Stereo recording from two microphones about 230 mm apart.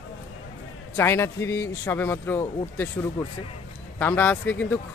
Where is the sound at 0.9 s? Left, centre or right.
Centre.